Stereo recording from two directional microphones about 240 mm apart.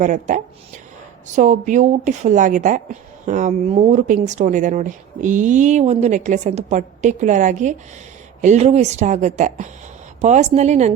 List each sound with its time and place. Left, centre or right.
0.0 s a woman's voice: right